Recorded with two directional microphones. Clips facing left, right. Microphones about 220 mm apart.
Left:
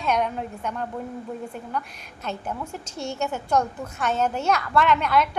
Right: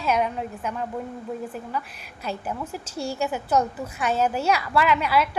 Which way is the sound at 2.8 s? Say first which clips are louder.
Right 3 dB; 35° right (ahead or behind).